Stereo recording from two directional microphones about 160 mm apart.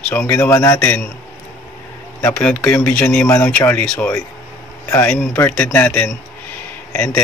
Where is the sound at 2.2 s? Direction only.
5° left (ahead or behind).